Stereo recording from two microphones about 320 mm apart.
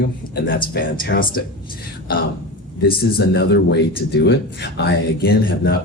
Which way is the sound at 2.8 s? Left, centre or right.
Left.